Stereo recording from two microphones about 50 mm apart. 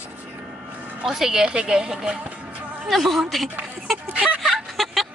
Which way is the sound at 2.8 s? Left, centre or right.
Centre.